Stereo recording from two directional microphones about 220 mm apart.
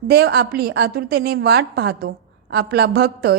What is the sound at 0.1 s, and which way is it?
A woman's voice, 50° right (ahead or behind).